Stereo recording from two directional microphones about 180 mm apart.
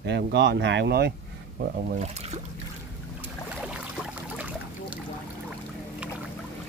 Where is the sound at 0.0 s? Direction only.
75° right (ahead or behind).